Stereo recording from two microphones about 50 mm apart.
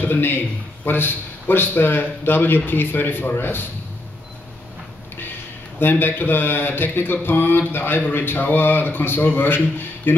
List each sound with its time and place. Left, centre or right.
0.0 s a man's voice: left
5.8 s a man's voice: left